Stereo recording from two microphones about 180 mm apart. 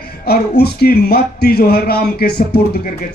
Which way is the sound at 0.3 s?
60° left (ahead or behind).